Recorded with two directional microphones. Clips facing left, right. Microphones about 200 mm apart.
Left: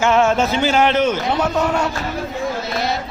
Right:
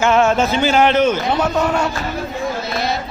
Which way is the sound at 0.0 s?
60° right (ahead or behind).